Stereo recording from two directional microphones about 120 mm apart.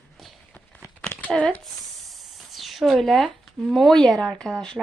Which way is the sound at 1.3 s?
10° left (ahead or behind).